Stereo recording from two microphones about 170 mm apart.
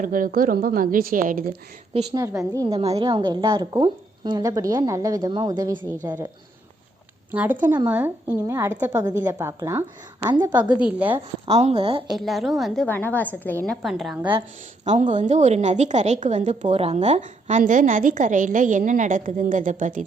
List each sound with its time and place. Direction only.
0.0 s a woman's voice: 55° right (ahead or behind)
2.1 s a woman's voice: 20° right (ahead or behind)
2.6 s a woman's voice: 35° right (ahead or behind)
7.3 s a woman's voice: 10° right (ahead or behind)
10.8 s a woman's voice: 5° right (ahead or behind)
11.4 s a woman's voice: 35° right (ahead or behind)
12.1 s a woman's voice: centre (ahead or behind)
13.8 s a woman's voice: centre (ahead or behind)
14.8 s a woman's voice: 45° right (ahead or behind)